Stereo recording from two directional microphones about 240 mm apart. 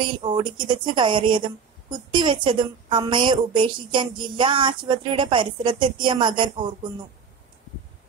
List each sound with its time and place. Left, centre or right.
0.0 s a woman's voice: centre